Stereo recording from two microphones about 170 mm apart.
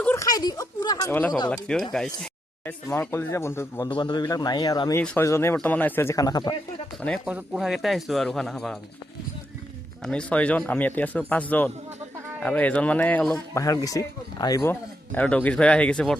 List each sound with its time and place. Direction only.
0.0 s a sound: 10° left (ahead or behind)
0.3 s a man's voice: 20° left (ahead or behind)
1.5 s speech: 5° left (ahead or behind)
2.9 s speech: 15° left (ahead or behind)
3.8 s a man's voice: 25° left (ahead or behind)
7.3 s speech: 5° right (ahead or behind)
10.0 s speech: 5° left (ahead or behind)
13.5 s speech: 20° left (ahead or behind)